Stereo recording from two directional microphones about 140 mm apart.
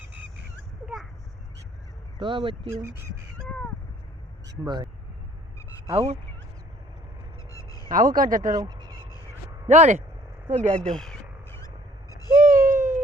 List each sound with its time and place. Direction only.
2.1 s speech: 35° right (ahead or behind)
4.6 s speech: 30° right (ahead or behind)
5.9 s speech: 45° right (ahead or behind)
7.5 s honk: 25° left (ahead or behind)
7.9 s speech: 80° right
8.5 s speech: 30° right (ahead or behind)
9.6 s speech: 55° right (ahead or behind)
10.8 s speech: 5° left (ahead or behind)
12.3 s bird: 70° right (ahead or behind)